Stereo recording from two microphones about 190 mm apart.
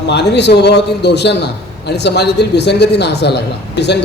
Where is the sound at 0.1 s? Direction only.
65° left (ahead or behind).